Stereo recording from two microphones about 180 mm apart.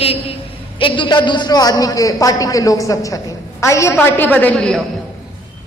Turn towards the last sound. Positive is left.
turn(degrees=5)  # may be behind; listen again after turning